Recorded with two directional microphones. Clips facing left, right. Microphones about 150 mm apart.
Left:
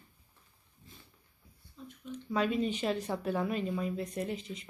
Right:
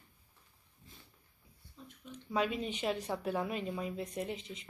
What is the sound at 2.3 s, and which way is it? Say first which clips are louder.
Speech: left 4 dB; 10° right (ahead or behind).